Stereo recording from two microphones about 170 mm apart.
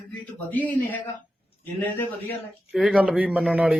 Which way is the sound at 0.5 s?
10° left (ahead or behind).